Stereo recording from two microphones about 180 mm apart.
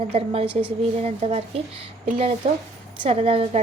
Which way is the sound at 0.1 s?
35° right (ahead or behind).